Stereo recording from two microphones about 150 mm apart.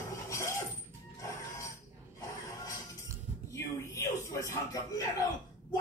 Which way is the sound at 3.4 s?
20° left (ahead or behind).